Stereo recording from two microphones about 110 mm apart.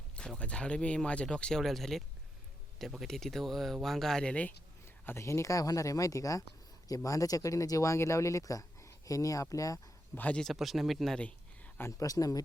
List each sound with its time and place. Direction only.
0.2 s speech: 10° left (ahead or behind)
5.0 s speech: 25° left (ahead or behind)
10.2 s speech: 15° left (ahead or behind)
10.4 s speech: centre (ahead or behind)
11.2 s a sound: 10° left (ahead or behind)
11.9 s speech: 30° left (ahead or behind)